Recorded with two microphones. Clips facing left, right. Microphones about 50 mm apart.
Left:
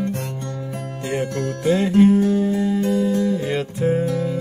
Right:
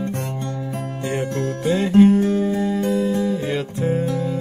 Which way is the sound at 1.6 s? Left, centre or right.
Centre.